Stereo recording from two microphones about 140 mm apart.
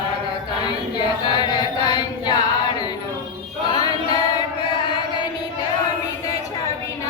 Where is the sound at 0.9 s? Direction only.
30° left (ahead or behind).